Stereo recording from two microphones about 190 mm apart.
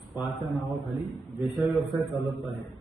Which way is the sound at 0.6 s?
10° right (ahead or behind).